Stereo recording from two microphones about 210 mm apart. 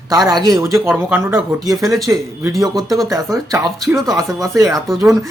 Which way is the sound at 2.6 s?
15° right (ahead or behind).